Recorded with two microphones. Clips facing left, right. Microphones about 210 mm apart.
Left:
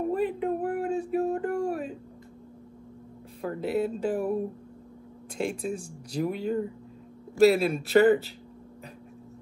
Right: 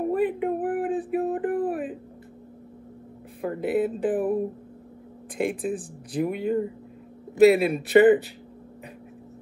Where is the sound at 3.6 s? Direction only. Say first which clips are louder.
Right 3 dB; 55° right (ahead or behind).